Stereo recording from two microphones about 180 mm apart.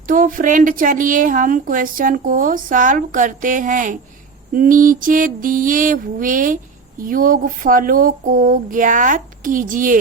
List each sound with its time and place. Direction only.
0.1 s a woman's voice: 50° right (ahead or behind)